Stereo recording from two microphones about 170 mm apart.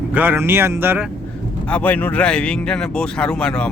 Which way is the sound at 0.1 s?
10° right (ahead or behind).